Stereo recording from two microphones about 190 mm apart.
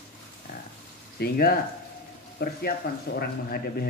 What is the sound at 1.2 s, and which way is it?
A man's voice, 55° left (ahead or behind).